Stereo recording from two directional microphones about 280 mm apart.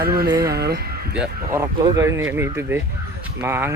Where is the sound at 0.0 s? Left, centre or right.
Right.